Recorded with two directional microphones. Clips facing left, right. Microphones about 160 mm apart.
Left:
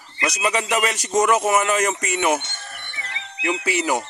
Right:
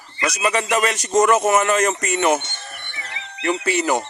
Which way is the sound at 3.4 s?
10° left (ahead or behind).